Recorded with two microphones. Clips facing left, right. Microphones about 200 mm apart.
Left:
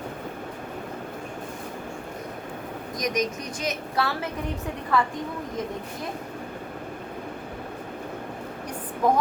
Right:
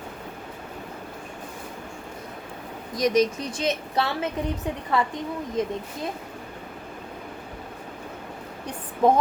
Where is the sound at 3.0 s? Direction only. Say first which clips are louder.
Right 6 dB; 30° right (ahead or behind).